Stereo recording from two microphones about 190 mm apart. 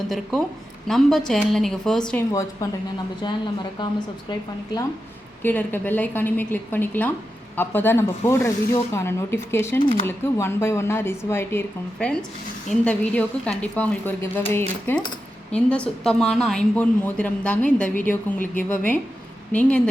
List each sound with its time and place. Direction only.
0.1 s a woman's voice: centre (ahead or behind)
2.3 s speech: 15° left (ahead or behind)
5.4 s a woman's voice: 10° left (ahead or behind)